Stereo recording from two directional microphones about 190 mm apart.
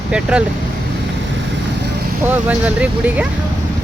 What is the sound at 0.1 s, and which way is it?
Speech, 5° right (ahead or behind).